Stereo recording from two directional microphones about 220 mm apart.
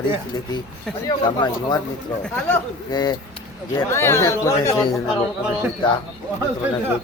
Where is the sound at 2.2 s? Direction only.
10° left (ahead or behind).